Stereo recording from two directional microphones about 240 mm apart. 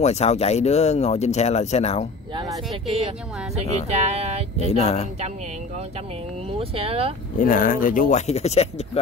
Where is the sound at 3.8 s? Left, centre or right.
Right.